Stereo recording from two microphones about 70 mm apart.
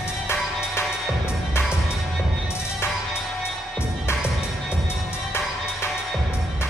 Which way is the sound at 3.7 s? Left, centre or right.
Left.